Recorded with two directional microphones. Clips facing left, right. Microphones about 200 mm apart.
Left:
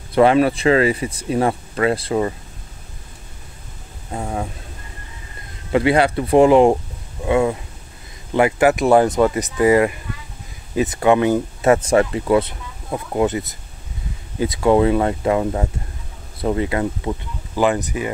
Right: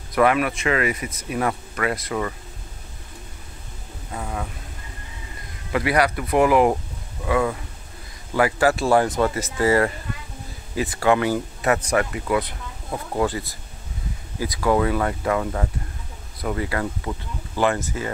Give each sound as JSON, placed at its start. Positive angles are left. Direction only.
{"t": 0.1, "sound": "speech", "side_deg": 30}
{"t": 4.1, "sound": "a sound", "side_deg": 30}
{"t": 5.7, "sound": "speech", "side_deg": 25}